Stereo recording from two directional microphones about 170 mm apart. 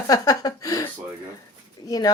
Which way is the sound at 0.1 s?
20° left (ahead or behind).